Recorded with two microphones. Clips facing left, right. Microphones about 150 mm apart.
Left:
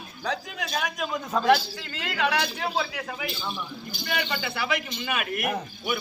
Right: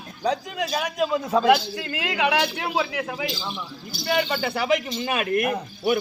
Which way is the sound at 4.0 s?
40° right (ahead or behind).